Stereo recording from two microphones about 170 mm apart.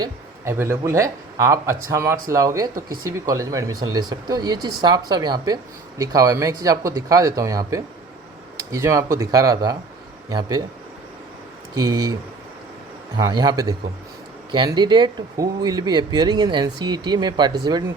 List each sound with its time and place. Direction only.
0.0 s speech: 15° right (ahead or behind)
11.7 s speech: 25° right (ahead or behind)
13.1 s speech: 25° right (ahead or behind)